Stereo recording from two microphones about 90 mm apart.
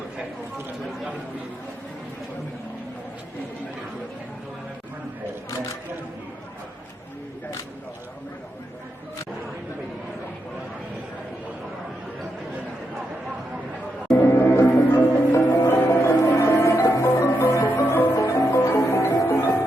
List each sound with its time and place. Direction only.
14.1 s music: 30° left (ahead or behind)